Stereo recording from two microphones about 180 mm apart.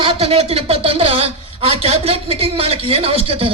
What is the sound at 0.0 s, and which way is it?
A man's voice, 30° right (ahead or behind).